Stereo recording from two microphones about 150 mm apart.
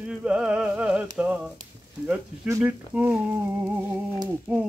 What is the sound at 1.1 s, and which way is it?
Frying, 5° right (ahead or behind).